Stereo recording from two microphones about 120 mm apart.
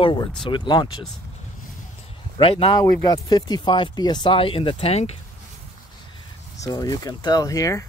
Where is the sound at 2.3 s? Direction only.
45° left (ahead or behind).